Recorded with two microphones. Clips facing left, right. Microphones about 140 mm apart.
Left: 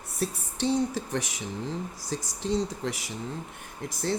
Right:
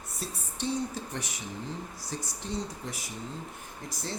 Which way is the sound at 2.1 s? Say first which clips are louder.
Left 7 dB; 90° left.